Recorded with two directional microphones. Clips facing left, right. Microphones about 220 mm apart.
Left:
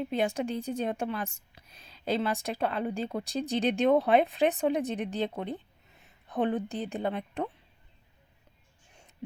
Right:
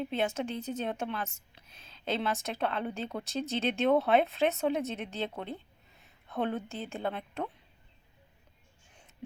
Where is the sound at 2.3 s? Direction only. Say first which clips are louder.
Left 2 dB; 10° left (ahead or behind).